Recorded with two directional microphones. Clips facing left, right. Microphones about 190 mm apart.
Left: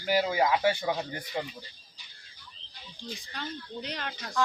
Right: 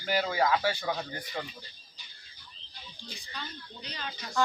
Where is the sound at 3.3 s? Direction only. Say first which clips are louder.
Left 5 dB; 75° left (ahead or behind).